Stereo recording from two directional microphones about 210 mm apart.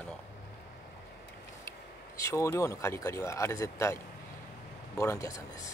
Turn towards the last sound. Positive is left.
turn(degrees=15)  # may be behind; listen again after turning